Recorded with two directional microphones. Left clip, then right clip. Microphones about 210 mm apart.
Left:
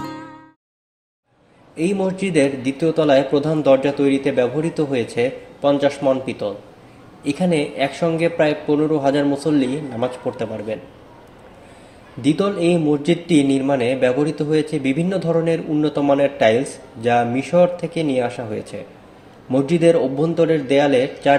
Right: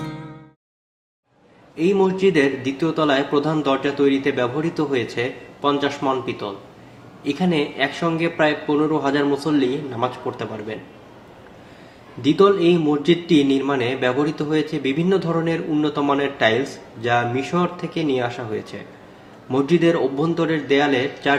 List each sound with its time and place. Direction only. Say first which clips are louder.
1.7 s a man's voice: right 3 dB; 35° left (ahead or behind)
12.2 s a man's voice: right 3 dB; 35° left (ahead or behind)